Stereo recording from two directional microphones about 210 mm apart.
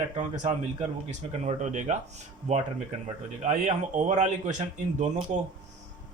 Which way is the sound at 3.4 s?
35° right (ahead or behind).